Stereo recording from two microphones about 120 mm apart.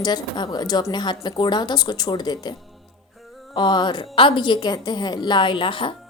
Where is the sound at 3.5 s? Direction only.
40° left (ahead or behind).